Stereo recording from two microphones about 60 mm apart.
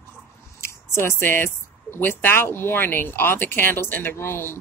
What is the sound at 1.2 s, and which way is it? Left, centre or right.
Speech, left.